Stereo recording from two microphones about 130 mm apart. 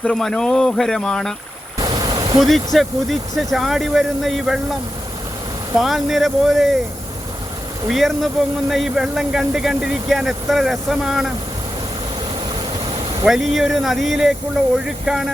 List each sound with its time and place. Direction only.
0.0 s speech: 5° left (ahead or behind)
1.8 s vehicle: 30° right (ahead or behind)
2.7 s speech: centre (ahead or behind)
7.9 s speech: centre (ahead or behind)
13.2 s speech: centre (ahead or behind)